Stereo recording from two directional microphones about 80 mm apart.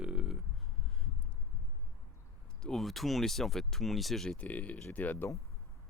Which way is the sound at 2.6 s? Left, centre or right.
Centre.